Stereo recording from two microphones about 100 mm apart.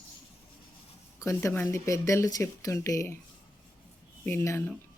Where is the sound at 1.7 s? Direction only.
30° left (ahead or behind).